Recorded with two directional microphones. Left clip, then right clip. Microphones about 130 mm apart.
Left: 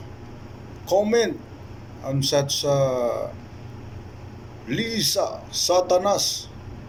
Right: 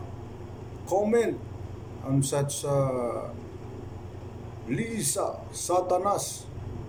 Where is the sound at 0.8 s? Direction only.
10° right (ahead or behind).